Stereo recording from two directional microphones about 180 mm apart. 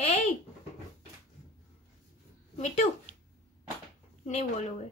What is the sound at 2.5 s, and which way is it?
Speech, 35° left (ahead or behind).